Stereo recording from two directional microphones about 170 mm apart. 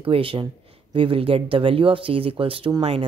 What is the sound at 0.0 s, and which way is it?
Speech, 30° right (ahead or behind).